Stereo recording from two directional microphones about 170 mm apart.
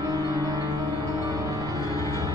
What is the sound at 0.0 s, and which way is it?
Music, 20° right (ahead or behind).